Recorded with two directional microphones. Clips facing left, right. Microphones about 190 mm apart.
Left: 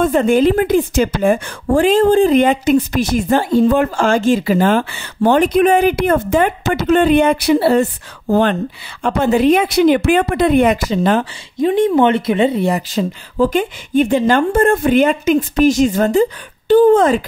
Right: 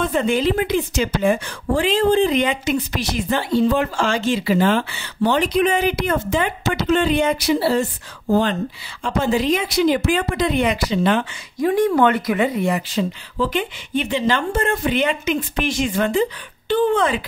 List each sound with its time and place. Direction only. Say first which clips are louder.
0.0 s speech: left 7 dB; 50° left (ahead or behind)
11.6 s speech: left 4 dB; 25° left (ahead or behind); by 17.2 s 45° left (ahead or behind)